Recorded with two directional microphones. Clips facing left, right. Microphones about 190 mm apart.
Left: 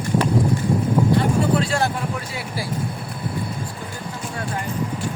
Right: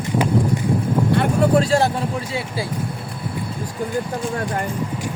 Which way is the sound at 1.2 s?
45° right (ahead or behind).